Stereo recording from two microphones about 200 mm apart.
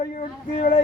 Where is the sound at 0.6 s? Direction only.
40° left (ahead or behind).